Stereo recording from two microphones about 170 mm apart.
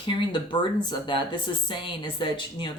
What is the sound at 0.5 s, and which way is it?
Speech, 25° left (ahead or behind).